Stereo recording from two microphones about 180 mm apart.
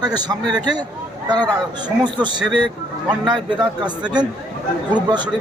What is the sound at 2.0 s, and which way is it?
Speech, 25° right (ahead or behind).